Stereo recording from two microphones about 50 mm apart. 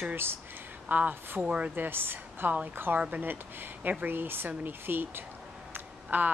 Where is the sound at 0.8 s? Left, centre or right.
Right.